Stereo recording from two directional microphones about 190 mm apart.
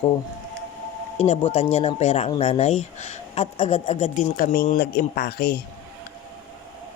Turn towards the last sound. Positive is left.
turn(degrees=55)  # may be behind; listen again after turning